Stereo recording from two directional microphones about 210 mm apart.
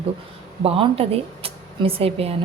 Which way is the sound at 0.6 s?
25° right (ahead or behind).